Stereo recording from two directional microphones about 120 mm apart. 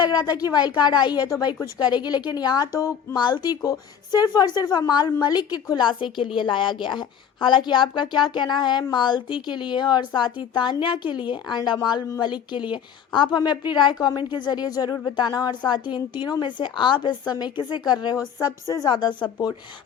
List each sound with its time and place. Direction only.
0.0 s a woman's voice: 35° left (ahead or behind)